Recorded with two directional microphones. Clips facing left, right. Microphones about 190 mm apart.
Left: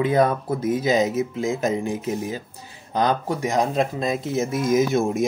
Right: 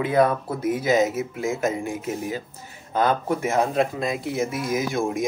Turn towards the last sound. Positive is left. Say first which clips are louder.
# left 4 dB
turn(degrees=25)  # may be behind; listen again after turning